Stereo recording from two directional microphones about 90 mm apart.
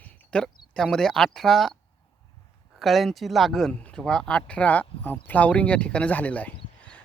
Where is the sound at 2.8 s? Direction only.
Centre (ahead or behind).